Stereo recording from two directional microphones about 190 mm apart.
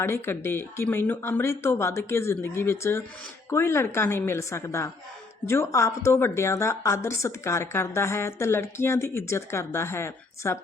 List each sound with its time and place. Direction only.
0.0 s a woman's voice: 15° left (ahead or behind)